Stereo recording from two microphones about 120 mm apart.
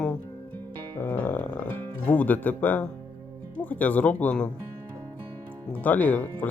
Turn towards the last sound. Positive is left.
turn(degrees=15)  # may be behind; listen again after turning